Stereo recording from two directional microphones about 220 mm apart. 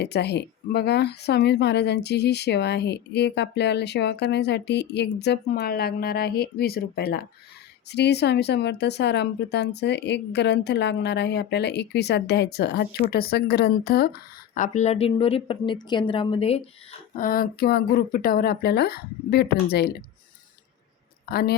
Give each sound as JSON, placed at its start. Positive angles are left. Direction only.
{"t": 0.0, "sound": "speech", "side_deg": 50}
{"t": 17.2, "sound": "speech", "side_deg": 40}
{"t": 21.2, "sound": "speech", "side_deg": 45}